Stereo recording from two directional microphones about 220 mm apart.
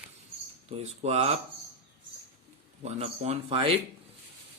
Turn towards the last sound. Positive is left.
turn(degrees=-25)  # may be behind; listen again after turning